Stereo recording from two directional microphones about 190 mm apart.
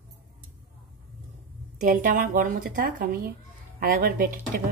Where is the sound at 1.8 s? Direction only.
45° right (ahead or behind).